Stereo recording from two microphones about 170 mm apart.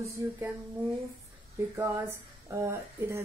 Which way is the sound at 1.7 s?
15° right (ahead or behind).